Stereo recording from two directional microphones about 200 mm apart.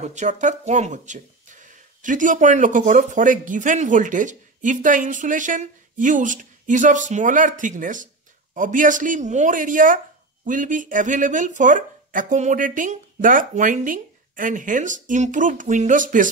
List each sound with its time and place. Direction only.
0.0 s speech: 35° right (ahead or behind)